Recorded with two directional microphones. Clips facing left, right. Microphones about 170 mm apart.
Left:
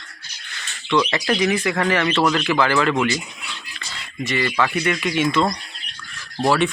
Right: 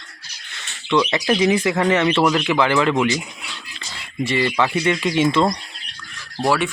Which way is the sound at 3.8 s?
25° right (ahead or behind).